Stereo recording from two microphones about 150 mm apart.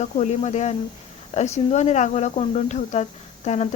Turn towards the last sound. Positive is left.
turn(degrees=50)  # may be behind; listen again after turning